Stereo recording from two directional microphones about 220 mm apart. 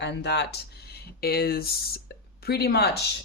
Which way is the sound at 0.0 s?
50° left (ahead or behind).